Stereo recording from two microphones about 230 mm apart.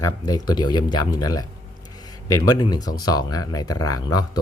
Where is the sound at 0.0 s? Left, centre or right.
Centre.